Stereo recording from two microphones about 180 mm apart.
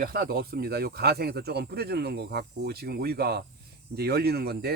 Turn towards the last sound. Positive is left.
turn(degrees=-60)  # may be behind; listen again after turning